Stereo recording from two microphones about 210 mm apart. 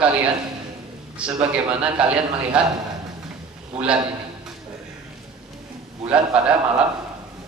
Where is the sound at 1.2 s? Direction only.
5° right (ahead or behind).